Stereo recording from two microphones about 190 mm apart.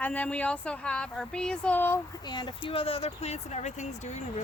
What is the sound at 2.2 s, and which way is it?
Speech, 25° left (ahead or behind).